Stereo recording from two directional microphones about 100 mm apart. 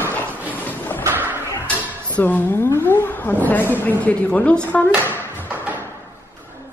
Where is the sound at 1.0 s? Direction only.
20° right (ahead or behind).